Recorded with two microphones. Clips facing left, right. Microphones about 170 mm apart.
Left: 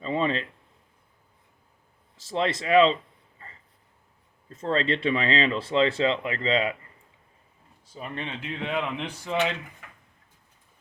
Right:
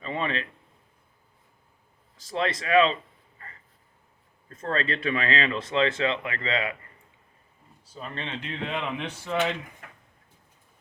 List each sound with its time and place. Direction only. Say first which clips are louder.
0.0 s speech: left 4 dB; 30° left (ahead or behind)
2.1 s speech: left 1 dB; 25° left (ahead or behind)
4.4 s speech: left 3 dB; 25° left (ahead or behind)
7.9 s speech: left 1 dB; 15° left (ahead or behind)
8.5 s speech: left 2 dB; 5° left (ahead or behind)